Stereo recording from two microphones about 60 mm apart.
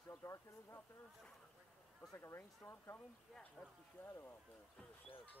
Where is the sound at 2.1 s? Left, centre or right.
Left.